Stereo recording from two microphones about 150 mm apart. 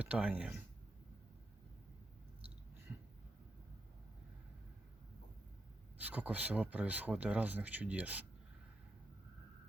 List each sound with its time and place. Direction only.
0.0 s speech: 10° right (ahead or behind)
6.0 s speech: 10° right (ahead or behind)